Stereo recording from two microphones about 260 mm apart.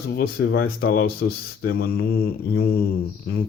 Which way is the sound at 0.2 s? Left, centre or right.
Left.